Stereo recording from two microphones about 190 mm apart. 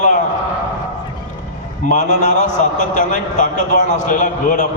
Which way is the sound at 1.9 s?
40° left (ahead or behind).